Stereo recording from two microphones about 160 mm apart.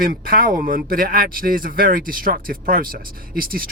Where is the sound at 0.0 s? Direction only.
65° right (ahead or behind).